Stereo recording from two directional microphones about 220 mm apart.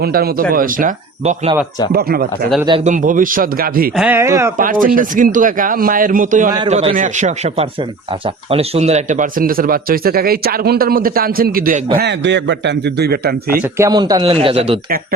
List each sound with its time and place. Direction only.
0.0 s a man's voice: 45° right (ahead or behind)
1.9 s a man's voice: 45° right (ahead or behind)
2.6 s speech: 30° right (ahead or behind)
3.9 s speech: 5° right (ahead or behind)
4.5 s speech: 40° right (ahead or behind)
11.9 s a man's voice: 50° right (ahead or behind)
13.7 s a man's voice: 15° right (ahead or behind)